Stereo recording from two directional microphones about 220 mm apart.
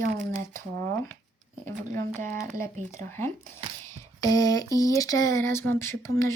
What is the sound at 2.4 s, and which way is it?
Speech, 10° left (ahead or behind).